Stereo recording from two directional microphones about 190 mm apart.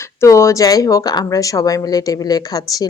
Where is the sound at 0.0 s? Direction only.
15° left (ahead or behind).